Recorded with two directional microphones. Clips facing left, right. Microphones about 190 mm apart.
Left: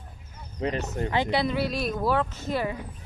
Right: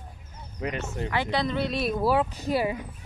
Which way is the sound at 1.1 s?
15° left (ahead or behind).